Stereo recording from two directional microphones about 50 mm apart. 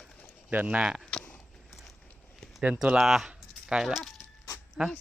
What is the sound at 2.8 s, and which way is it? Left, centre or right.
Speech, centre.